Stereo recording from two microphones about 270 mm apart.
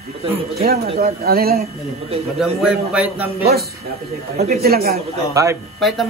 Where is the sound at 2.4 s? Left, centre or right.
Centre.